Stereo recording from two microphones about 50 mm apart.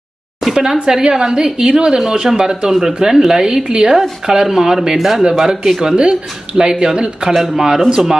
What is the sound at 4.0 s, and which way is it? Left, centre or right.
A woman's voice, centre.